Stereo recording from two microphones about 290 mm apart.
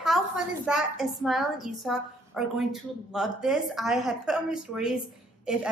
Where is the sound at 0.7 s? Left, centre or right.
Centre.